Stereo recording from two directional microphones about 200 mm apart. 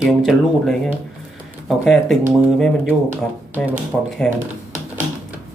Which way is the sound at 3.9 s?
Centre (ahead or behind).